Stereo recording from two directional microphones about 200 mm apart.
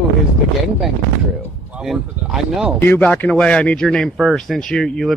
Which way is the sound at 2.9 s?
10° left (ahead or behind).